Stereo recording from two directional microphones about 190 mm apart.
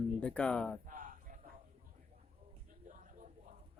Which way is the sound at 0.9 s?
45° right (ahead or behind).